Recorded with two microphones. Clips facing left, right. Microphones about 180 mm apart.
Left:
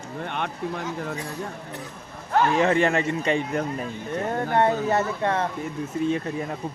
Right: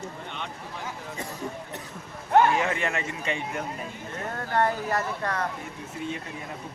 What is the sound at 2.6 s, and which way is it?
A man's voice, 35° left (ahead or behind).